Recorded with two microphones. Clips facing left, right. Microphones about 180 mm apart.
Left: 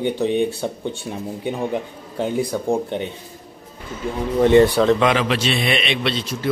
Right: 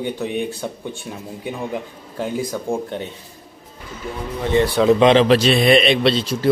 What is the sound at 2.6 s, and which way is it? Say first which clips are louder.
Speech: left 3 dB; 20° left (ahead or behind).